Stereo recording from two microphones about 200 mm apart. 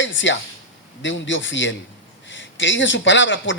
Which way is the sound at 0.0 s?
65° left (ahead or behind).